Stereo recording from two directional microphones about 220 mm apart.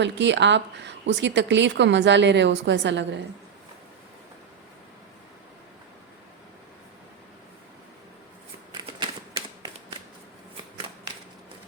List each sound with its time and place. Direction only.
0.0 s a woman's voice: 55° right (ahead or behind)